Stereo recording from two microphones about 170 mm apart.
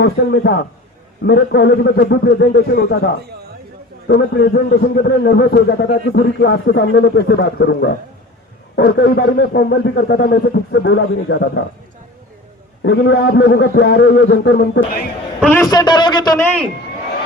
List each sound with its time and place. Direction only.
0.0 s a man's voice: 80° left
4.1 s a man's voice: 70° left (ahead or behind)
12.8 s a man's voice: 90° left
15.4 s a man's voice: 10° left (ahead or behind)
15.6 s speech: 25° left (ahead or behind)